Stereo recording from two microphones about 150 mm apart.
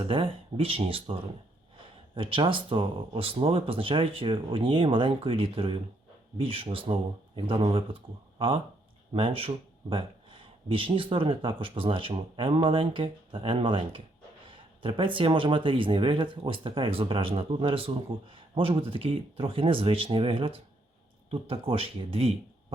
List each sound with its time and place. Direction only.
0.1 s speech: 40° right (ahead or behind)
2.1 s speech: 35° right (ahead or behind)